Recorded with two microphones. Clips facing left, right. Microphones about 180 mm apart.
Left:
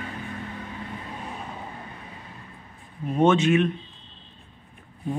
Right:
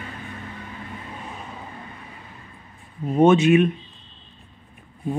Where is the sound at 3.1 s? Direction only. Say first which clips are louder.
Right 4 dB; 10° right (ahead or behind).